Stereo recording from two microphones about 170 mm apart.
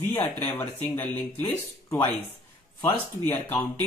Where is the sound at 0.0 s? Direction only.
10° left (ahead or behind).